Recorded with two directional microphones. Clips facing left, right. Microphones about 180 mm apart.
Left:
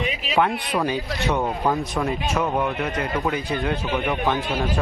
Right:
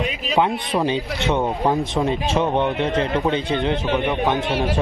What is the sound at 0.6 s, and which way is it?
A man's voice, 25° right (ahead or behind).